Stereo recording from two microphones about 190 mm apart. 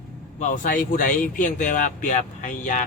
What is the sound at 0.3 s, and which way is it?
Speech, 40° left (ahead or behind).